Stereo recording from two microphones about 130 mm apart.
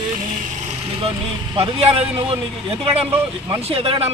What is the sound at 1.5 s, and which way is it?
Speech, 50° right (ahead or behind).